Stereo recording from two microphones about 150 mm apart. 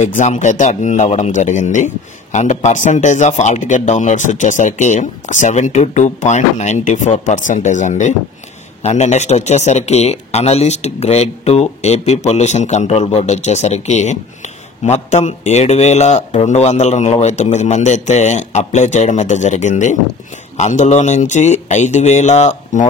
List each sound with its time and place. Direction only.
0.0 s speech: 55° left (ahead or behind)